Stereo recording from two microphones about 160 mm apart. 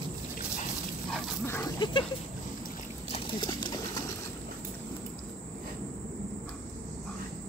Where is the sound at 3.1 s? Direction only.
30° left (ahead or behind).